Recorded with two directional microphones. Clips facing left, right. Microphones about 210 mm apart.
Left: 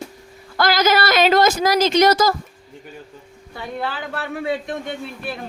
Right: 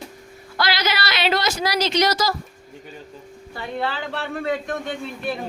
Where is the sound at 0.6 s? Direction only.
45° left (ahead or behind).